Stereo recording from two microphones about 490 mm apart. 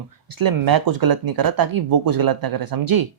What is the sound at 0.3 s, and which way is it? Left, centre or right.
Speech, right.